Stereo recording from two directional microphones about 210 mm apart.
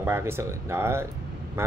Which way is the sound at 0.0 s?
10° right (ahead or behind).